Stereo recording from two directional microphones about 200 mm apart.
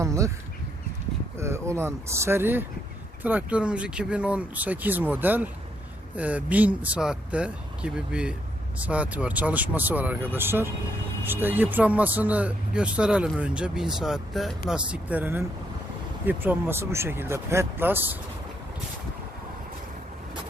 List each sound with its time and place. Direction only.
0.0 s bird: 15° right (ahead or behind)
1.4 s speech: 15° right (ahead or behind)